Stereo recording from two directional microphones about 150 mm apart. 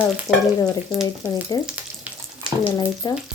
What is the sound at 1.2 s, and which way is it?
Speech, 15° right (ahead or behind).